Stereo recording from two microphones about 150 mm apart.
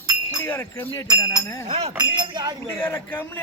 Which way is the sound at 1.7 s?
45° right (ahead or behind).